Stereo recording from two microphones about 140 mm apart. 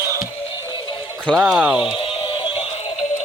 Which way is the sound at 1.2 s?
Centre (ahead or behind).